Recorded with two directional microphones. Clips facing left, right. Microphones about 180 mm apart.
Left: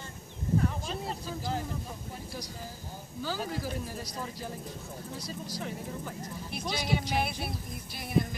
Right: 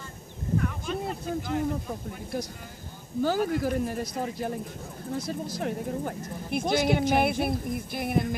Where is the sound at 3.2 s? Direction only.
55° right (ahead or behind).